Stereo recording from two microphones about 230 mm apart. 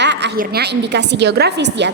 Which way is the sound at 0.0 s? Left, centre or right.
Right.